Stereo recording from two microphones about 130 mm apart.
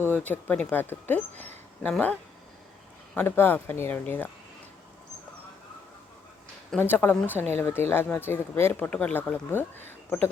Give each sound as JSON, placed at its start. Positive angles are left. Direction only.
{"t": 0.1, "sound": "speech", "side_deg": 10}
{"t": 3.2, "sound": "speech", "side_deg": 15}
{"t": 6.7, "sound": "speech", "side_deg": 15}